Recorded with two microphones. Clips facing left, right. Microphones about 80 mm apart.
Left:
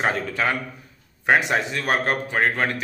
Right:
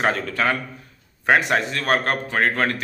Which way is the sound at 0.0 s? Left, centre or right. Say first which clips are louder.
Right 2 dB; centre.